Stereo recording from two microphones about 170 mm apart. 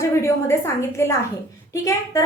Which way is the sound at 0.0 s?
15° left (ahead or behind).